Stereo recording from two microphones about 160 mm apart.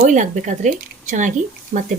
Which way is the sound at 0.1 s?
50° right (ahead or behind).